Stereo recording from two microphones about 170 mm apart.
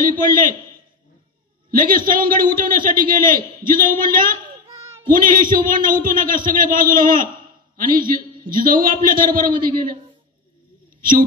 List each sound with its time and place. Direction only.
0.1 s a man's voice: 55° right (ahead or behind)
1.7 s a man's voice: 55° right (ahead or behind)
4.6 s a sound: 15° right (ahead or behind)
5.1 s a man's voice: 55° right (ahead or behind)
11.0 s speech: 55° right (ahead or behind)